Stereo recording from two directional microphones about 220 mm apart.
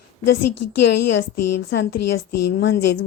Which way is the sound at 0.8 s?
50° left (ahead or behind).